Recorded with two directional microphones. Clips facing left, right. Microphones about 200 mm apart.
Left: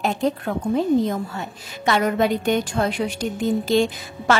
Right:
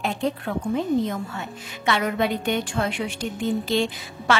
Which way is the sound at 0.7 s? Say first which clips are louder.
Left 5 dB; 35° left (ahead or behind).